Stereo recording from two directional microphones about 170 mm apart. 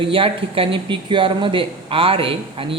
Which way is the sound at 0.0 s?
30° right (ahead or behind).